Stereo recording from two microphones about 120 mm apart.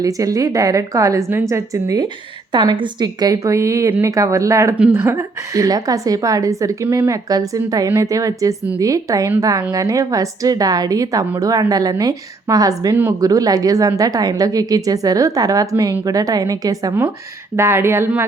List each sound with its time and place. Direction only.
0.0 s a woman's voice: 30° right (ahead or behind)
2.5 s a woman's voice: 40° right (ahead or behind); by 18.3 s 20° right (ahead or behind)